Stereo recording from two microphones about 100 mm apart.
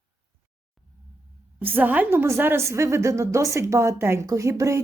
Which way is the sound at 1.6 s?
20° right (ahead or behind).